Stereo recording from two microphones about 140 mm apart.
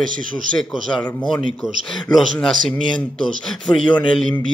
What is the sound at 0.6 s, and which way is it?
Speech, 5° left (ahead or behind).